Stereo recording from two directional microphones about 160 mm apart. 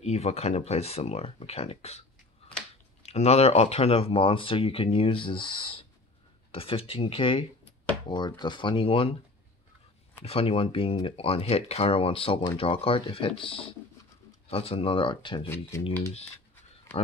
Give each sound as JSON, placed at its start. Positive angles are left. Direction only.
{"t": 0.0, "sound": "speech", "side_deg": 40}
{"t": 10.2, "sound": "speech", "side_deg": 35}
{"t": 15.7, "sound": "speech", "side_deg": 15}